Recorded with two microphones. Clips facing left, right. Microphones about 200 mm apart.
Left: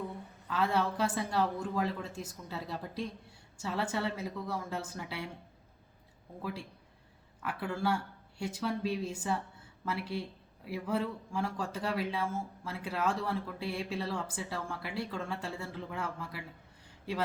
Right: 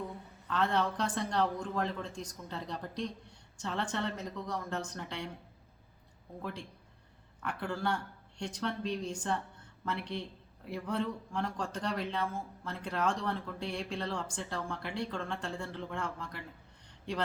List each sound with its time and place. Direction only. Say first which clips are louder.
0.4 s speech: even; 5° left (ahead or behind)
6.4 s a man's voice: left 2 dB; 5° left (ahead or behind)